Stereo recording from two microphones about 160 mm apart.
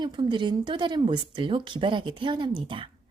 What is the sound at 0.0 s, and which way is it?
A woman's voice, 30° right (ahead or behind).